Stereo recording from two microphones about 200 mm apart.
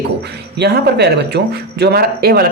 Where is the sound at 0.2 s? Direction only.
55° right (ahead or behind).